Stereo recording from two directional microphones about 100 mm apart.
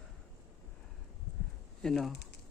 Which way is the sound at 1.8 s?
5° left (ahead or behind).